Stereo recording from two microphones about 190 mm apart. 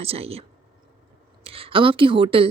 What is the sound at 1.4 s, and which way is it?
A woman's voice, 30° right (ahead or behind).